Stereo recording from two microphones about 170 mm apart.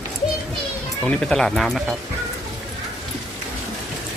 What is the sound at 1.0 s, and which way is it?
Speech, 5° left (ahead or behind).